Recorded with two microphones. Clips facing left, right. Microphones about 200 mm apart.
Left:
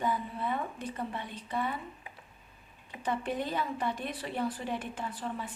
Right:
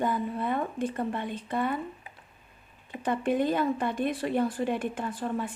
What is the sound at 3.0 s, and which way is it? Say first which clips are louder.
A woman's voice: right 7 dB; 55° right (ahead or behind).